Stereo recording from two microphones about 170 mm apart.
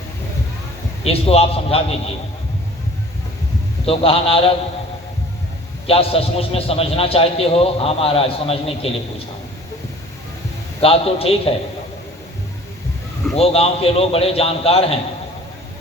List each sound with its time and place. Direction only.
1.0 s a man's voice: 35° left (ahead or behind)
3.8 s a man's voice: 35° left (ahead or behind)
5.9 s a man's voice: 35° left (ahead or behind)
10.8 s a man's voice: 35° left (ahead or behind)
13.3 s a man's voice: 35° left (ahead or behind)